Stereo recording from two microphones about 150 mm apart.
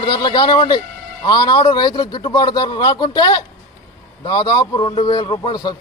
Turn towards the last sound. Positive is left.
turn(degrees=30)  # may be behind; listen again after turning